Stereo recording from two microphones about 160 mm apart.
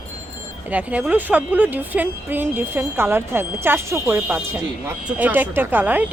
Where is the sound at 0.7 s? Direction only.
10° right (ahead or behind).